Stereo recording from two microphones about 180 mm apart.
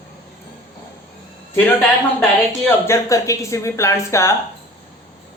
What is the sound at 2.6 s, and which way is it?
Speech, 15° left (ahead or behind).